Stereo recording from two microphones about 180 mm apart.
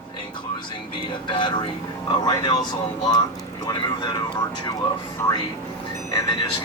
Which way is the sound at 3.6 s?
20° left (ahead or behind).